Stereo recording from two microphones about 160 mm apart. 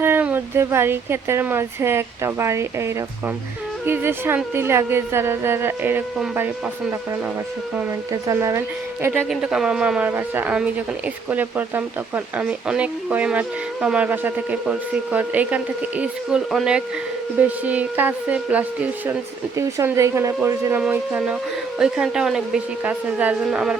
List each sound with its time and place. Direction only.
0.0 s speech: 10° right (ahead or behind)
8.1 s speech: 20° right (ahead or behind)
9.3 s speech: 5° right (ahead or behind)